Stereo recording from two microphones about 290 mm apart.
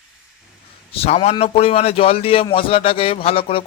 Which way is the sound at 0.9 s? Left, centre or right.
Centre.